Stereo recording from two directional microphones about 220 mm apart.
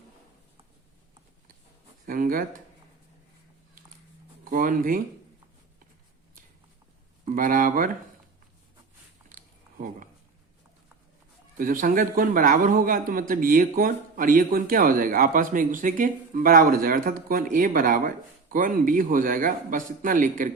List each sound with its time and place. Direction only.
2.0 s a man's voice: 40° right (ahead or behind)
4.4 s a man's voice: 40° right (ahead or behind)
7.3 s a man's voice: 40° right (ahead or behind)
9.3 s a sound: 35° right (ahead or behind)
11.5 s a man's voice: 35° right (ahead or behind)